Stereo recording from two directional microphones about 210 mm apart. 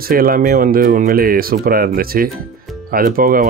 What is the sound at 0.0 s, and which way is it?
Speech, 45° right (ahead or behind).